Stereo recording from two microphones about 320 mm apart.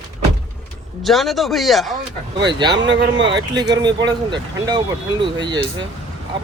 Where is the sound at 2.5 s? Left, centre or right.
Centre.